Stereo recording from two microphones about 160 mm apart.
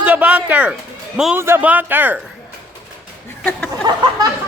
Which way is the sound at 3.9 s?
25° right (ahead or behind).